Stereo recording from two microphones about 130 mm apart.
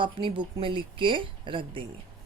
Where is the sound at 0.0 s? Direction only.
40° right (ahead or behind).